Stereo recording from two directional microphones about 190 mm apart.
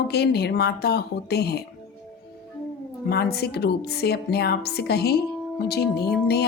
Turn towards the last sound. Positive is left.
turn(degrees=55)  # may be behind; listen again after turning